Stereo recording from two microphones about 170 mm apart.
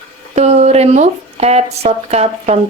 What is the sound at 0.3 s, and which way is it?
Speech, 40° right (ahead or behind).